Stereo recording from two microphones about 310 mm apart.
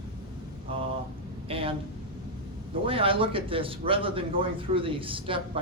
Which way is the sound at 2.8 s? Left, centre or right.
Centre.